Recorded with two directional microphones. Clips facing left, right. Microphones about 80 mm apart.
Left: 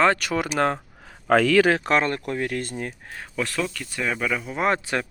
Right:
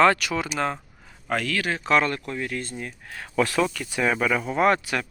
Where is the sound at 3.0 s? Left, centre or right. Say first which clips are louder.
Even; left.